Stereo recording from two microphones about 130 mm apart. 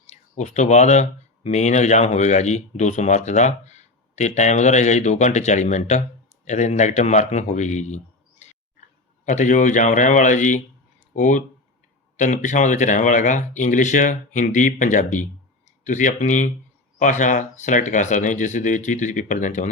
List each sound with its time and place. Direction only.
0.1 s speech: 60° left (ahead or behind)
9.2 s speech: 75° left (ahead or behind)